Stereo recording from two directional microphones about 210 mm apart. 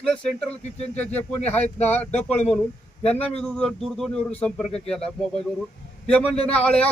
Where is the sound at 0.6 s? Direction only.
30° left (ahead or behind).